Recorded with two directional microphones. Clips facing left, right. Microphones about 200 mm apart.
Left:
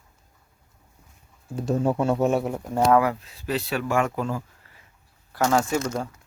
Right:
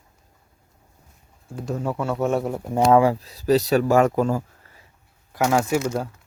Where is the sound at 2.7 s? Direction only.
20° right (ahead or behind); by 4.4 s 40° right (ahead or behind).